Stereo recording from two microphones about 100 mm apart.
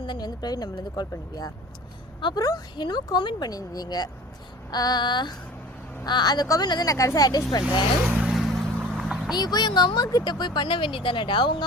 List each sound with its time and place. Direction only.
0.0 s speech: 45° left (ahead or behind)
8.0 s vehicle: 10° right (ahead or behind)
9.3 s speech: 45° left (ahead or behind)